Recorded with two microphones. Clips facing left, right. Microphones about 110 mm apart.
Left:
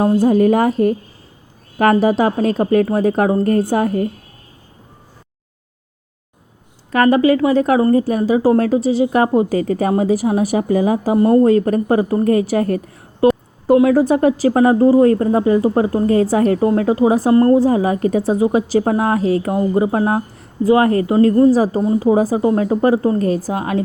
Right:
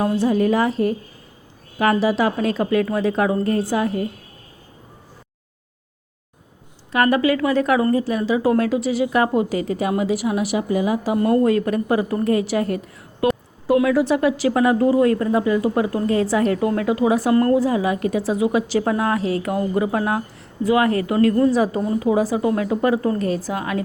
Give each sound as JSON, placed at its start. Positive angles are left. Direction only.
{"t": 0.0, "sound": "a woman's voice", "side_deg": 40}
{"t": 6.9, "sound": "a woman's voice", "side_deg": 35}
{"t": 13.2, "sound": "a sound", "side_deg": 35}
{"t": 13.7, "sound": "a woman's voice", "side_deg": 35}
{"t": 19.5, "sound": "a woman's voice", "side_deg": 25}
{"t": 21.8, "sound": "a woman's voice", "side_deg": 25}